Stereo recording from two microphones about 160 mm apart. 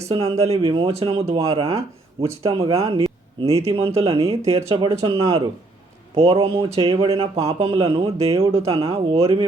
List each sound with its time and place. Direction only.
0.1 s speech: 40° right (ahead or behind)